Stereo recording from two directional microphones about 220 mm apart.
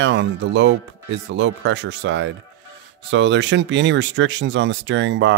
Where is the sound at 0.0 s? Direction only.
55° right (ahead or behind).